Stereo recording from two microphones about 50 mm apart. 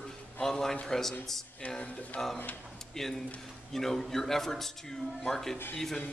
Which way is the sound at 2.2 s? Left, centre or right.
Centre.